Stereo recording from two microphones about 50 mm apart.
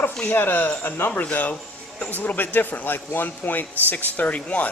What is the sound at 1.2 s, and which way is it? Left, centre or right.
Speech, left.